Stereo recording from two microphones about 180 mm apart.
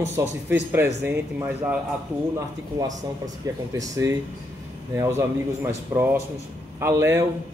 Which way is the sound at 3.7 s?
20° right (ahead or behind).